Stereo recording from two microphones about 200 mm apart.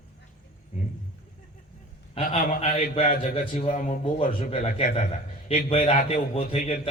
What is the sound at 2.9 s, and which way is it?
Speech, 30° left (ahead or behind).